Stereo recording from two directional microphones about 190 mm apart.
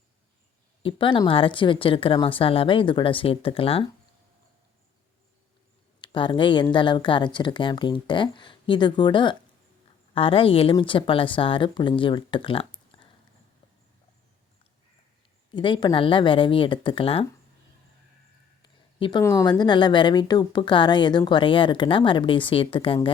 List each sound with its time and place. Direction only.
0.8 s a woman's voice: 25° left (ahead or behind)
6.0 s a woman's voice: 25° left (ahead or behind)
15.5 s a woman's voice: 25° left (ahead or behind)
18.9 s speech: 25° left (ahead or behind)
19.2 s a woman's voice: 15° left (ahead or behind)